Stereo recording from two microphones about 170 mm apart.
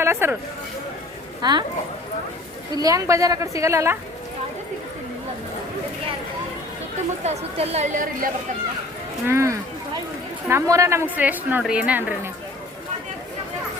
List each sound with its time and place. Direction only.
0.0 s speech: 15° right (ahead or behind)
1.4 s speech: 25° right (ahead or behind)
2.7 s a woman's voice: 20° right (ahead or behind)
7.3 s a woman's voice: 35° right (ahead or behind)
9.2 s a woman's voice: 15° right (ahead or behind)